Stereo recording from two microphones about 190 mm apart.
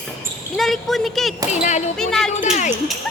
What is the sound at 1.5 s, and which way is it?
Speech, 35° left (ahead or behind).